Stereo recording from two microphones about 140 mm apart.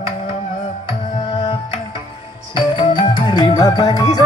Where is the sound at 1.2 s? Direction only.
35° left (ahead or behind).